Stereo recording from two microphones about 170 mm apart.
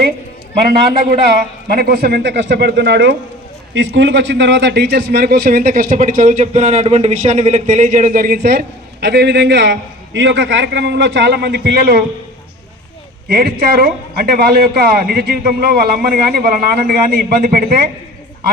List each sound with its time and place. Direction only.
1.2 s a man's voice: 70° right (ahead or behind)
13.2 s a man's voice: 60° right (ahead or behind)